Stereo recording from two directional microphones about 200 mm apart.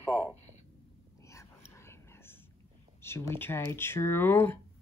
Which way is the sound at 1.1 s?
15° left (ahead or behind).